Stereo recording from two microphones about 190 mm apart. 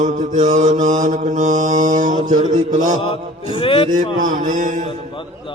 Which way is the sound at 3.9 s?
40° right (ahead or behind).